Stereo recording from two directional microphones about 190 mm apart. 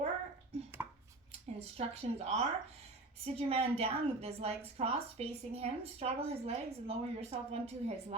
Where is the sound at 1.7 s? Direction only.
35° right (ahead or behind).